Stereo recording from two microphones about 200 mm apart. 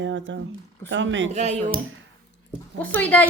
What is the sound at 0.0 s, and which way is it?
Speech, 65° right (ahead or behind).